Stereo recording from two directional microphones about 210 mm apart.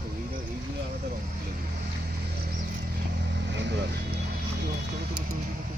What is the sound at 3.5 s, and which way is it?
Vehicle, 55° right (ahead or behind).